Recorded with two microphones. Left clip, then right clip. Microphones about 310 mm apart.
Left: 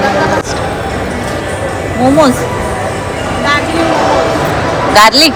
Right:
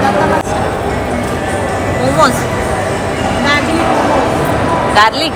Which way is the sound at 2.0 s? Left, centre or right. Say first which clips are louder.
Left 3 dB; centre.